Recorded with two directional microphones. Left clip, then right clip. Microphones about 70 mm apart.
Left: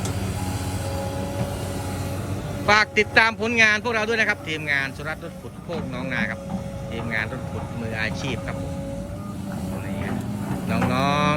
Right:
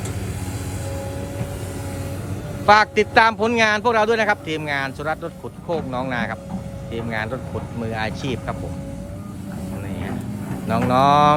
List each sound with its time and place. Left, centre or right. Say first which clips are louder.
2.6 s a man's voice: right 4 dB; right
10.7 s a man's voice: right 7 dB; right